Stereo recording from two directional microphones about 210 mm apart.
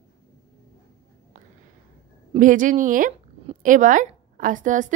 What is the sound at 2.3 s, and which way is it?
A woman's voice, 40° right (ahead or behind).